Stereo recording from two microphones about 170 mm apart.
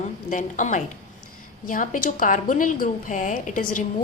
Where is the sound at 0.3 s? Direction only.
45° left (ahead or behind).